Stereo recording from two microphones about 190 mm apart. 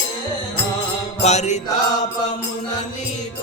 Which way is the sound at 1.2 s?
35° left (ahead or behind).